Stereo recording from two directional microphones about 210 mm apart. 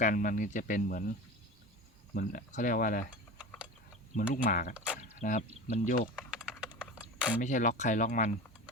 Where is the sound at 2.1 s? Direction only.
40° left (ahead or behind).